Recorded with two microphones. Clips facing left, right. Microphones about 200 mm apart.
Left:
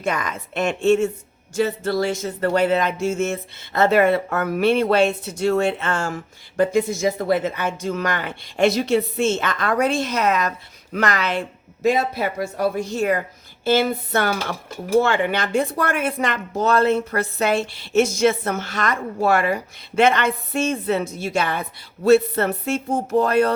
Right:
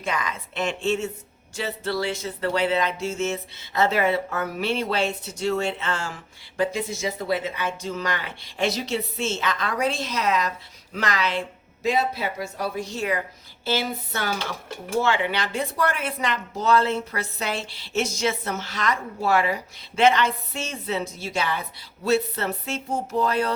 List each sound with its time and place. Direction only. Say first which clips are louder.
0.0 s speech: left 4 dB; 45° left (ahead or behind)